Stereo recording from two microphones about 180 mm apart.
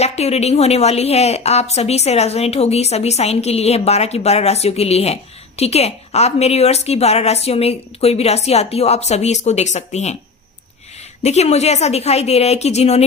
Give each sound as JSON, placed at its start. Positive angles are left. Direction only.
{"t": 0.0, "sound": "a woman's voice", "side_deg": 35}
{"t": 11.2, "sound": "a woman's voice", "side_deg": 40}